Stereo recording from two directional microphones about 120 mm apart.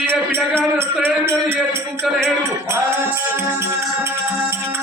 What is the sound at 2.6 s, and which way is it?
Music, 20° right (ahead or behind).